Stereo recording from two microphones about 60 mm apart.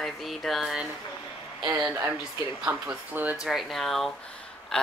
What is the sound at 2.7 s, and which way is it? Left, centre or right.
Speech, right.